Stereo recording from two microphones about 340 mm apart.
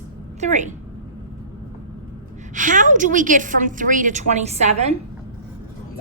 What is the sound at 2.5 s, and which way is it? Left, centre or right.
A woman's voice, right.